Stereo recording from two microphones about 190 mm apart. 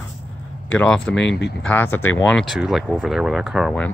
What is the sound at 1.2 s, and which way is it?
Speech, 65° left (ahead or behind).